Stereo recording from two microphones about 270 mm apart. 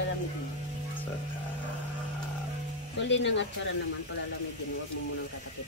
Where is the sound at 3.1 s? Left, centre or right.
Left.